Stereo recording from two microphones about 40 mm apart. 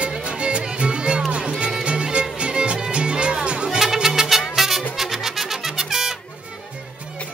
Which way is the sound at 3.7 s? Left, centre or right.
Centre.